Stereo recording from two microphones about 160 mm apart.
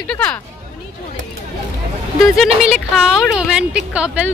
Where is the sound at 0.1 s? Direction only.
5° left (ahead or behind).